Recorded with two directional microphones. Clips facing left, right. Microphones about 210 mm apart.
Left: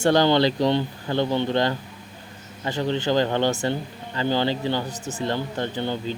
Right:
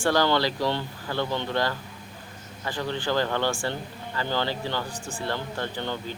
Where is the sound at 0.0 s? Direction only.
20° left (ahead or behind).